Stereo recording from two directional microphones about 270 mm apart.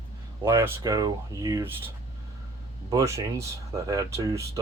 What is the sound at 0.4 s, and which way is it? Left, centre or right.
Speech, centre.